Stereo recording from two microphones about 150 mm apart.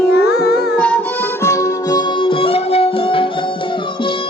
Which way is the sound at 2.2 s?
35° left (ahead or behind).